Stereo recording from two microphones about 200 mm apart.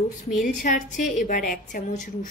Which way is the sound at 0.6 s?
40° left (ahead or behind).